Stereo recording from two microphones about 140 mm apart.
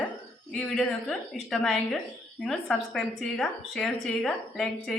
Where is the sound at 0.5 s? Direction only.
Centre (ahead or behind).